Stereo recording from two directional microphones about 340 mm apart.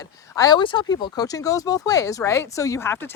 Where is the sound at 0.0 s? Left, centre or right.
Centre.